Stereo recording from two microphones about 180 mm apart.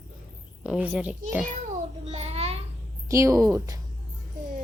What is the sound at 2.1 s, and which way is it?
Speech, 35° right (ahead or behind).